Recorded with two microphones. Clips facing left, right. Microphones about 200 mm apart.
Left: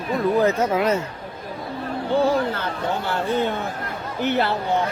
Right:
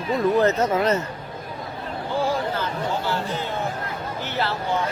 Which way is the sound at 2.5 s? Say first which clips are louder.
Even; 60° left (ahead or behind).